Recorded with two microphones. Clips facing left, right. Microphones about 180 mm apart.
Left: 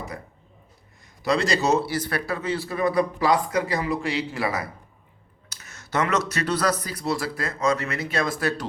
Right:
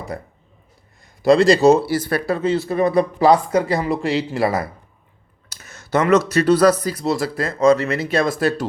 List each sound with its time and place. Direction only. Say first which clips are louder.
1.3 s speech: right 10 dB; 30° right (ahead or behind)
5.8 s speech: right 8 dB; 30° right (ahead or behind)